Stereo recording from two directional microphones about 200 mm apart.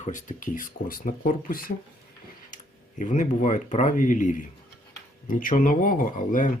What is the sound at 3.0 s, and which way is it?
Speech, 40° left (ahead or behind).